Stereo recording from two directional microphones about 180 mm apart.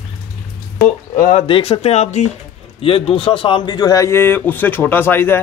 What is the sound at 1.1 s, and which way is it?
Speech, 35° left (ahead or behind).